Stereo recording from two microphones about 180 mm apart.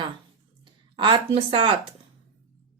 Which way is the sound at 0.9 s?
25° right (ahead or behind).